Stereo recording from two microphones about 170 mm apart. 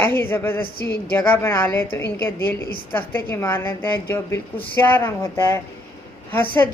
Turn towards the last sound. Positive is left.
turn(degrees=10)  # may be behind; listen again after turning